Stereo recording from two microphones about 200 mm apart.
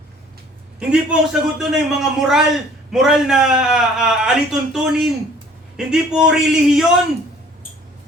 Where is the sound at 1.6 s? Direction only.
Centre (ahead or behind).